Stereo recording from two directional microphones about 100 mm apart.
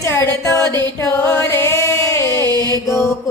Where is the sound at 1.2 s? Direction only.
20° left (ahead or behind).